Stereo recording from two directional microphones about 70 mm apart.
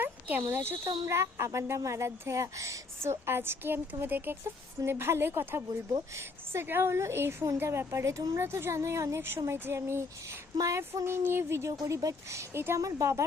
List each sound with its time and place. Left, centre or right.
0.0 s a sound: right
0.4 s speech: right
11.9 s speech: right